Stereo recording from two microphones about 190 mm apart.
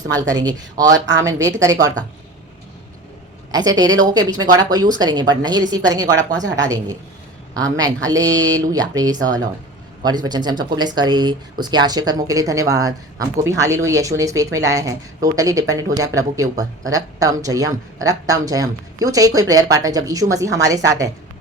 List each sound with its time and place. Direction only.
0.1 s a woman's voice: 20° right (ahead or behind)
3.5 s a woman's voice: 20° right (ahead or behind)